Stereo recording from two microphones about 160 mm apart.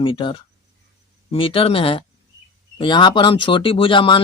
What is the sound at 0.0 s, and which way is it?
Speech, 30° left (ahead or behind).